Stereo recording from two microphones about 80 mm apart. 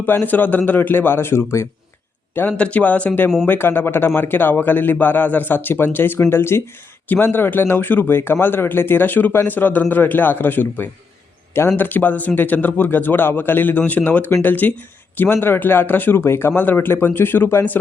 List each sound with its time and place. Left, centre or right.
0.2 s speech: left